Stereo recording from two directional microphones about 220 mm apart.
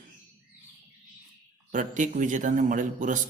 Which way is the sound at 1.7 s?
35° right (ahead or behind).